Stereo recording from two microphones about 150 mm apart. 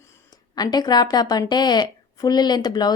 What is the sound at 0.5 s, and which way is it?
Speech, 30° left (ahead or behind).